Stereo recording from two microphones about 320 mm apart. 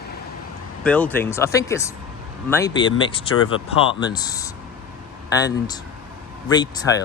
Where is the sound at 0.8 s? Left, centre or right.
Centre.